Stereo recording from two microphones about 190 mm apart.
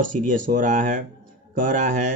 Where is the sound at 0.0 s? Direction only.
45° right (ahead or behind).